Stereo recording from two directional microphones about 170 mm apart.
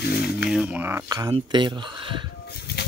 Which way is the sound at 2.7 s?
70° left (ahead or behind).